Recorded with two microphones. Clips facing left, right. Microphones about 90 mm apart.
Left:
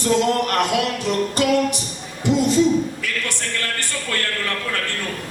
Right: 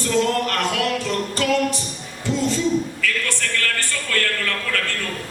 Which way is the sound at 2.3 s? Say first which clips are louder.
Left 4 dB; 15° left (ahead or behind).